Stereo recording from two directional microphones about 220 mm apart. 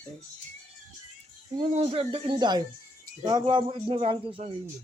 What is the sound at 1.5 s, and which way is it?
Speech, 25° right (ahead or behind).